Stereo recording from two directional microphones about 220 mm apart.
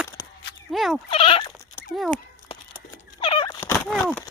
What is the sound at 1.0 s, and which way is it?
Bleat, 25° left (ahead or behind).